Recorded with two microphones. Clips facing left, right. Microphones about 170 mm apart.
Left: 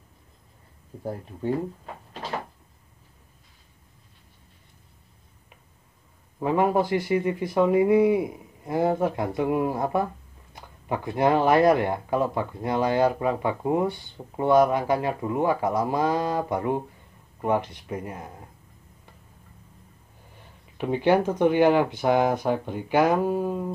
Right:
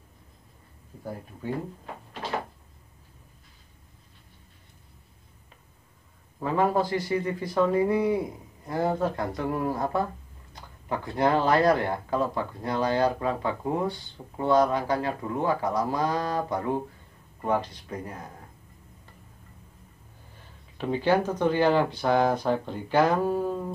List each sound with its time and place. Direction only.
6.4 s speech: 15° left (ahead or behind)
20.7 s speech: 15° left (ahead or behind)